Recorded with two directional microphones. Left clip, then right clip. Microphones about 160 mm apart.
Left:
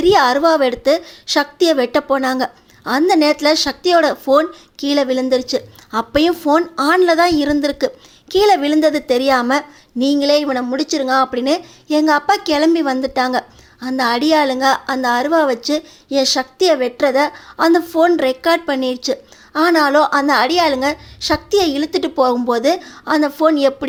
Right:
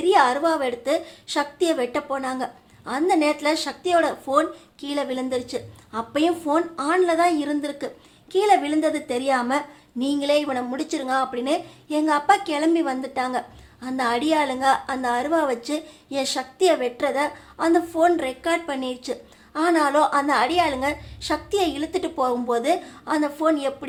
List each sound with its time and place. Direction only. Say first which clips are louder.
0.0 s a woman's voice: left 6 dB; 35° left (ahead or behind)